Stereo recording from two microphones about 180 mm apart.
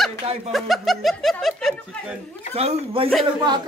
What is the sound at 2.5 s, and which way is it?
Speech, 35° right (ahead or behind).